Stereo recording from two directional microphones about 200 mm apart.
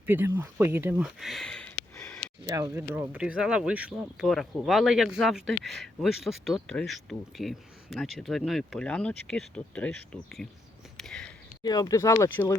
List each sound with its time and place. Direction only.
0.0 s speech: 10° right (ahead or behind); by 2.2 s 5° left (ahead or behind)
2.5 s speech: 15° right (ahead or behind); by 10.5 s centre (ahead or behind)
10.9 s a sound: 5° left (ahead or behind)
11.6 s speech: 20° left (ahead or behind)